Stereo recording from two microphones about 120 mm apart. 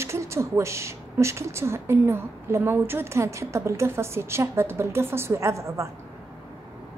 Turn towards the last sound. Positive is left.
turn(degrees=-25)  # may be behind; listen again after turning